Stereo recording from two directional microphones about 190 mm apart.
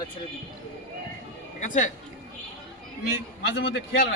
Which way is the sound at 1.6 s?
40° left (ahead or behind).